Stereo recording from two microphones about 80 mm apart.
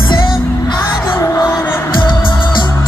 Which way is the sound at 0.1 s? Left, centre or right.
Left.